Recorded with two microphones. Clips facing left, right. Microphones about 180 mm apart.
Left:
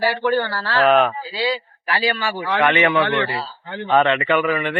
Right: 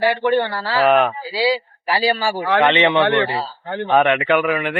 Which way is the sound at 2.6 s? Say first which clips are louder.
Right 1 dB; 20° right (ahead or behind).